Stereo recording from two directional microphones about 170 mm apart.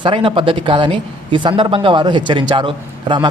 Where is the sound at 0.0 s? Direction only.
30° right (ahead or behind).